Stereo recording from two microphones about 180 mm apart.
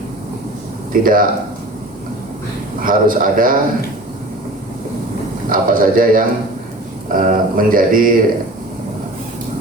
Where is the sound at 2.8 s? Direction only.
50° right (ahead or behind).